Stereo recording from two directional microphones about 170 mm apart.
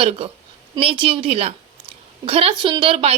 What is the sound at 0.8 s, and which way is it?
A woman's voice, 30° right (ahead or behind).